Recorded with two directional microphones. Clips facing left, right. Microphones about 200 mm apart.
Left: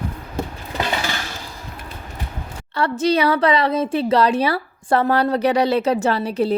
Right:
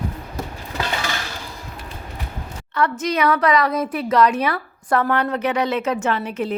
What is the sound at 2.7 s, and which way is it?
A woman's voice, 30° left (ahead or behind).